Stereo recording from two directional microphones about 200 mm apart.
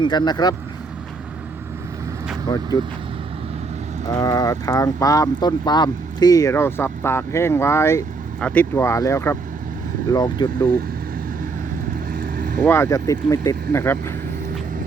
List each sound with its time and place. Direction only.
0.0 s speech: 20° left (ahead or behind)
2.5 s speech: 20° left (ahead or behind)
4.0 s speech: 20° left (ahead or behind)
12.1 s vehicle: 45° right (ahead or behind)
12.6 s speech: 10° left (ahead or behind)